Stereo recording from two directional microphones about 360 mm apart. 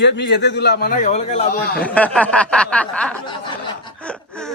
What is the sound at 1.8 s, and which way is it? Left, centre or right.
Speech, centre.